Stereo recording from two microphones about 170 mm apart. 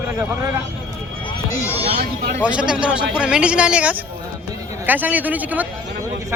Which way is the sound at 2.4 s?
5° right (ahead or behind).